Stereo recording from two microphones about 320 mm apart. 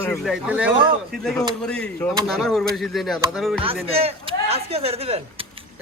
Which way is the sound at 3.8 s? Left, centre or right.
Centre.